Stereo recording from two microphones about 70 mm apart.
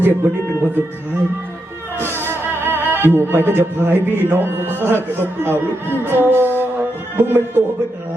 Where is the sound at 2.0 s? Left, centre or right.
Right.